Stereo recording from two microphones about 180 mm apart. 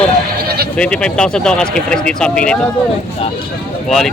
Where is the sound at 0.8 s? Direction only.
5° left (ahead or behind).